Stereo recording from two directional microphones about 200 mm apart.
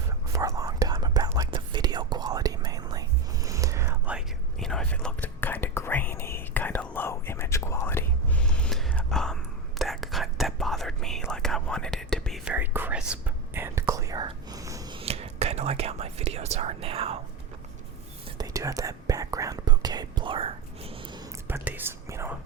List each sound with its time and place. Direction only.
0.3 s whispering: 15° right (ahead or behind)
4.6 s whispering: 5° left (ahead or behind); by 17.2 s 30° right (ahead or behind)
18.3 s whispering: 20° right (ahead or behind)
21.4 s whispering: 10° right (ahead or behind)